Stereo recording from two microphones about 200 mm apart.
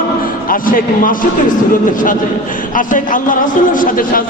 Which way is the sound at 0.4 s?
45° left (ahead or behind).